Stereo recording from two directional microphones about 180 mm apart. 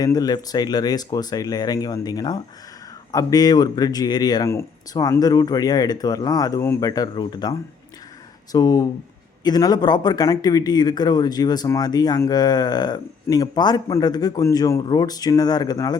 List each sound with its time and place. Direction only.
0.0 s a man's voice: 20° left (ahead or behind)
8.5 s a man's voice: 20° left (ahead or behind)